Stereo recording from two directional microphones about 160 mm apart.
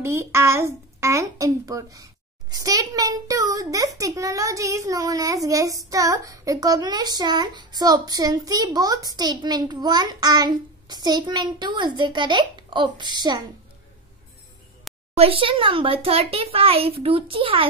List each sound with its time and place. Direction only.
0.0 s a child's voice: 15° right (ahead or behind)
15.1 s a child's voice: 35° right (ahead or behind)